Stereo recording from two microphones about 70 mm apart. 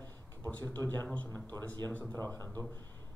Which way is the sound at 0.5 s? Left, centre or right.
Left.